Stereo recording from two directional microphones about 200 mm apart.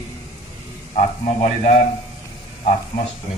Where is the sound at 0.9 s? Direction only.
35° left (ahead or behind).